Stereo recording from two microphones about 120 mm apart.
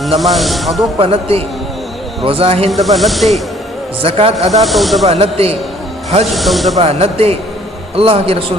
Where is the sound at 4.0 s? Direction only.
50° right (ahead or behind).